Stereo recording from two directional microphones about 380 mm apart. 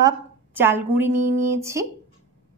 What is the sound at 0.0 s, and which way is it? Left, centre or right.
A woman's voice, centre.